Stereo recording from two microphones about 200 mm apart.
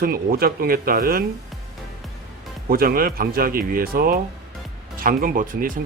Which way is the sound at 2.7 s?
45° right (ahead or behind).